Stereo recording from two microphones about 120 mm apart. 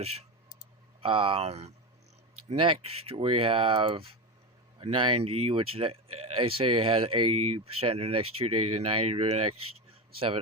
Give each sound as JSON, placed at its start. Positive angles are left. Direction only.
{"t": 1.0, "sound": "speech", "side_deg": -50}
{"t": 3.1, "sound": "speech", "side_deg": -50}